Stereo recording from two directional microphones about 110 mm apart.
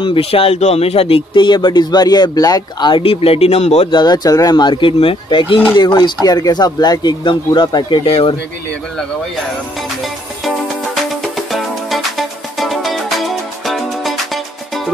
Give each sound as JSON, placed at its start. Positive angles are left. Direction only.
{"t": 0.0, "sound": "speech", "side_deg": 55}
{"t": 3.0, "sound": "speech", "side_deg": 60}
{"t": 3.9, "sound": "speech", "side_deg": 40}
{"t": 8.1, "sound": "speech", "side_deg": 60}
{"t": 9.8, "sound": "music", "side_deg": 0}